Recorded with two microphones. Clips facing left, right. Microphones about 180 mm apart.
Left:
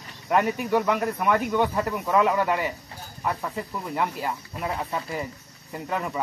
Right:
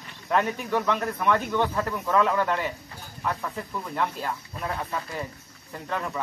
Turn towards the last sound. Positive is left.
turn(degrees=10)  # may be behind; listen again after turning